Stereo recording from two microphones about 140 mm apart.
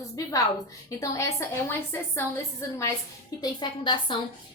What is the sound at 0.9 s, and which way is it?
A woman's voice, 20° left (ahead or behind).